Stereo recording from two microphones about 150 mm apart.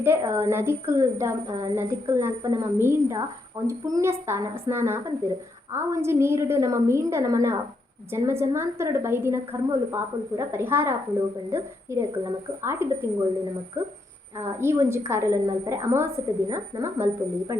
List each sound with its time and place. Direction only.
0.0 s a woman's voice: 15° right (ahead or behind)
14.3 s a woman's voice: 15° right (ahead or behind)